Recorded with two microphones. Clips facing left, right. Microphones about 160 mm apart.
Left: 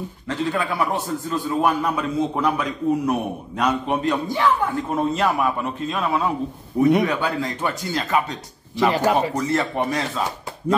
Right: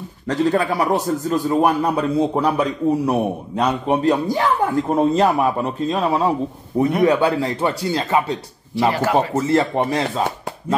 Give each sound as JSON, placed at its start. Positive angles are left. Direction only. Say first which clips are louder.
{"t": 0.3, "sound": "a man's voice", "louder": "right 6 dB", "side_deg": -40}